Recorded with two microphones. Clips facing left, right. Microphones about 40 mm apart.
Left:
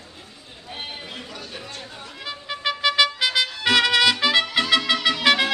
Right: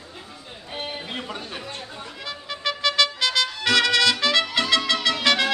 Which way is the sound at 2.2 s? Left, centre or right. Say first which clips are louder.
Left 2 dB; centre.